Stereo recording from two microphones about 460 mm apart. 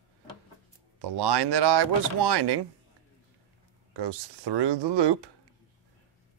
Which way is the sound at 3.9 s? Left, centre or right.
Right.